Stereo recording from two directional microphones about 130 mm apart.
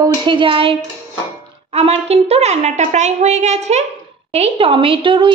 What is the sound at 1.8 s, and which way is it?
A woman's voice, 50° right (ahead or behind).